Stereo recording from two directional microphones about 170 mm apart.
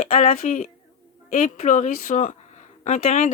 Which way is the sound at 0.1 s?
40° left (ahead or behind).